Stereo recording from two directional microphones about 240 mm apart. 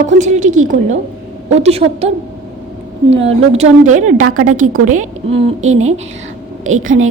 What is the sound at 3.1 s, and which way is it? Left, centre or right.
Speech, right.